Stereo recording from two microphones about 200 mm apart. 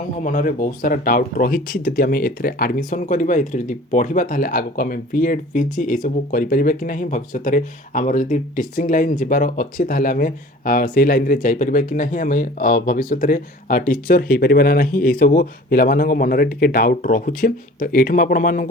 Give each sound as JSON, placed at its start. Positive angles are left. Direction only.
{"t": 0.3, "sound": "speech", "side_deg": 40}